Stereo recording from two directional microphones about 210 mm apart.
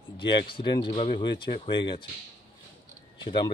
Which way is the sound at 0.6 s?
25° left (ahead or behind).